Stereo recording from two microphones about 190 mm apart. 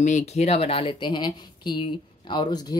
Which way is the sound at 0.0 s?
40° left (ahead or behind).